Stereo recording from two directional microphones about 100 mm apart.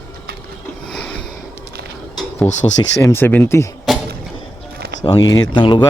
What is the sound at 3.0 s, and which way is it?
Speech, 25° left (ahead or behind).